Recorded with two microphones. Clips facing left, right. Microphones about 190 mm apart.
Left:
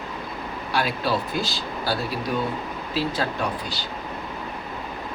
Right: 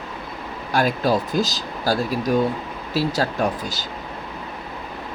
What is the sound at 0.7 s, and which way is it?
Speech, 45° right (ahead or behind).